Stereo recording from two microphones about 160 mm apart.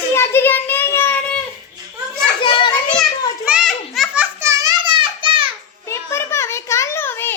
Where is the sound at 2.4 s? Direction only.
30° left (ahead or behind).